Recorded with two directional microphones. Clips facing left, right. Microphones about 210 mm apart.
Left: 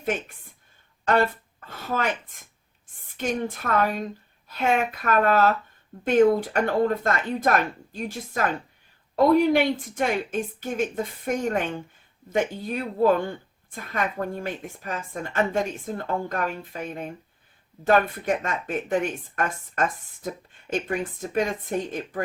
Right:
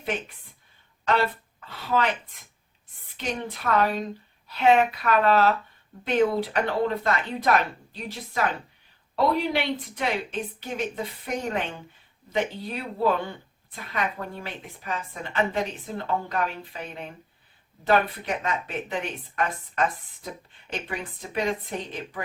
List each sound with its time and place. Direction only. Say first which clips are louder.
0.0 s a woman's voice: left 3 dB; 45° left (ahead or behind)
3.2 s speech: left 4 dB; 50° left (ahead or behind)